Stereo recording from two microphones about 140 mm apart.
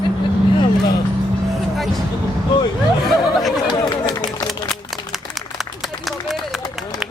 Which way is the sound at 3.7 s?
25° left (ahead or behind).